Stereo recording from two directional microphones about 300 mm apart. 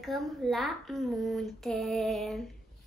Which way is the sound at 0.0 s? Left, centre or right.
Centre.